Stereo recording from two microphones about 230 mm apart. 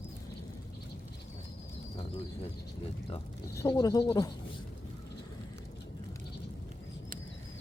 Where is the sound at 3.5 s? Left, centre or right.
Centre.